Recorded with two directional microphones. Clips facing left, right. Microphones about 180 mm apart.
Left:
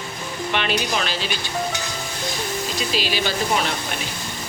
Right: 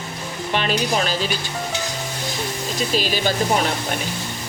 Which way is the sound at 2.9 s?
45° right (ahead or behind).